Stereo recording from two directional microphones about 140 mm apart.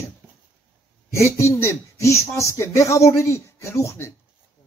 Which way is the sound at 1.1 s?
20° left (ahead or behind).